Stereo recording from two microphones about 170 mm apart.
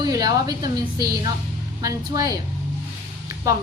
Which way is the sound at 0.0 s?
20° right (ahead or behind).